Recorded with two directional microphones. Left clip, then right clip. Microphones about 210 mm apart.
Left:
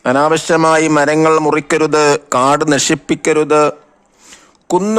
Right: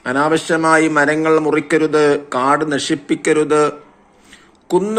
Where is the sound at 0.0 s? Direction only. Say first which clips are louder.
Left 4 dB; 45° left (ahead or behind).